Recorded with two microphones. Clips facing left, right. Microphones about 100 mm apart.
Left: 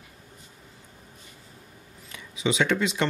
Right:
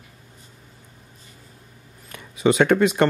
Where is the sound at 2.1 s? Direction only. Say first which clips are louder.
Right 8 dB; 50° right (ahead or behind).